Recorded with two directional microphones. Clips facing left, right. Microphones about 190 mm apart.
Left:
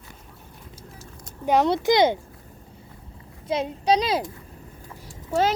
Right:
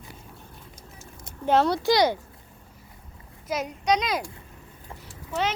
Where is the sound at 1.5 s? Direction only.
15° left (ahead or behind).